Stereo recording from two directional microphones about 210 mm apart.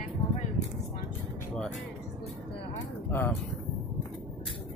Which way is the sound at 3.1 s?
10° left (ahead or behind).